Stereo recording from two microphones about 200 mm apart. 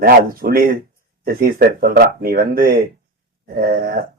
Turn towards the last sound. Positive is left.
turn(degrees=-50)  # may be behind; listen again after turning